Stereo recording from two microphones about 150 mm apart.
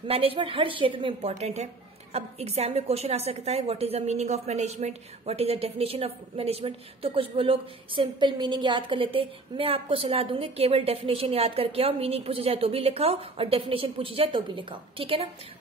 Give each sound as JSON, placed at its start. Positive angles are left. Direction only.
{"t": 0.1, "sound": "a woman's voice", "side_deg": -40}